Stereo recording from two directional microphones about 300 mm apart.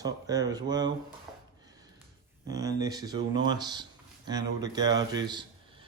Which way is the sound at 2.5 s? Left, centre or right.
Centre.